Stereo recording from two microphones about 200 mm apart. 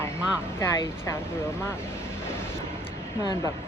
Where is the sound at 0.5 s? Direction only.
15° left (ahead or behind).